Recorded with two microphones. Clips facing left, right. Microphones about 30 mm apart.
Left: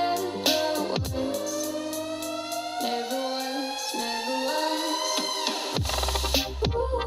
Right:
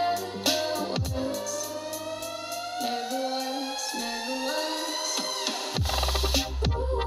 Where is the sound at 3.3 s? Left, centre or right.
Left.